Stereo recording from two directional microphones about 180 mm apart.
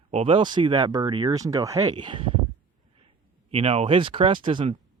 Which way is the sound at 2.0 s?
30° right (ahead or behind).